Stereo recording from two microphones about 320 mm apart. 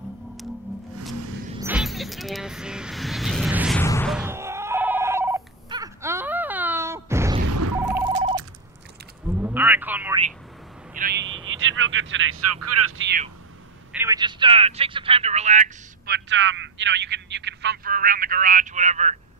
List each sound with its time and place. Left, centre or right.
1.6 s vehicle: centre
3.8 s telephone bell ringing: centre
7.4 s a sound: right
9.3 s a sound: centre
11.1 s vehicle: centre
11.5 s speech: right
13.9 s speech: centre
16.3 s speech: right